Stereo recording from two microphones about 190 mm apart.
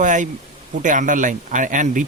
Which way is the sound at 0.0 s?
40° right (ahead or behind).